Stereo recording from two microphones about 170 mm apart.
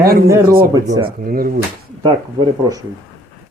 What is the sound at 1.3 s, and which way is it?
Speech, 55° right (ahead or behind).